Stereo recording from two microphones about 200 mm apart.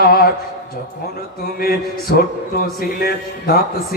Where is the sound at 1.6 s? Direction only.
50° left (ahead or behind).